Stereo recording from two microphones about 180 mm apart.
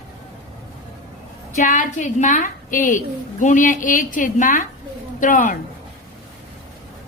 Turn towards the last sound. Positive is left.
turn(degrees=45)  # may be behind; listen again after turning